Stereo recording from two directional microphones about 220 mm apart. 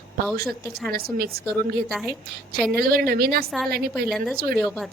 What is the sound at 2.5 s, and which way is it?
A woman's voice, 45° right (ahead or behind).